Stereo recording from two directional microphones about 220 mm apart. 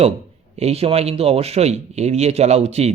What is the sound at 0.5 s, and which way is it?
Speech, 30° right (ahead or behind).